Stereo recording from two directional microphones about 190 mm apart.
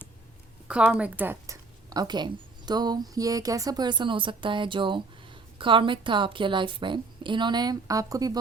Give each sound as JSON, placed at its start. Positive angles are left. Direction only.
{"t": 0.7, "sound": "a woman's voice", "side_deg": -5}